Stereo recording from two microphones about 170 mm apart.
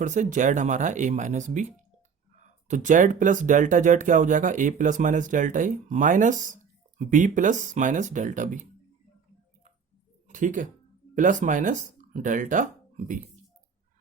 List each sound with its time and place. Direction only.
0.0 s speech: 45° right (ahead or behind)
10.2 s speech: 50° right (ahead or behind)